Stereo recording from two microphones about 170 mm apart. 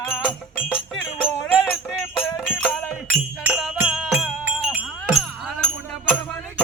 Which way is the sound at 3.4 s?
5° right (ahead or behind).